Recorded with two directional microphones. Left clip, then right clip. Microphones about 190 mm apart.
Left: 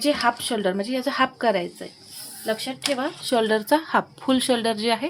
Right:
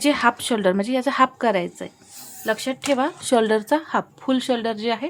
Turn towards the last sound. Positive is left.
turn(degrees=-5)  # may be behind; listen again after turning